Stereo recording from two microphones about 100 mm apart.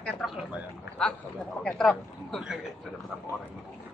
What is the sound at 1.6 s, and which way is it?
Speech, 5° left (ahead or behind).